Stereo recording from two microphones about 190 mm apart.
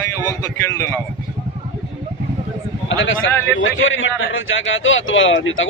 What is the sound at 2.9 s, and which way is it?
A man's voice, 90° left.